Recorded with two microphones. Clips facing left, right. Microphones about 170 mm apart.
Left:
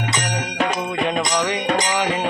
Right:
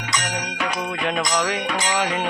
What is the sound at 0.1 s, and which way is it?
Music, 30° left (ahead or behind).